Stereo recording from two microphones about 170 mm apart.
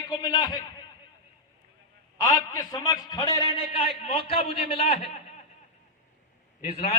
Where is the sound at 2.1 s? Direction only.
20° left (ahead or behind).